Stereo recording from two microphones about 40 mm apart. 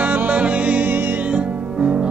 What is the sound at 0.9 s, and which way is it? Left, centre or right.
Music, right.